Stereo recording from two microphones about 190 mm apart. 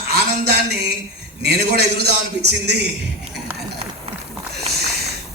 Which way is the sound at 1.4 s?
60° right (ahead or behind).